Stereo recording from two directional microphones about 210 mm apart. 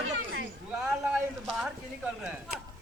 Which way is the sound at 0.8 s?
5° right (ahead or behind).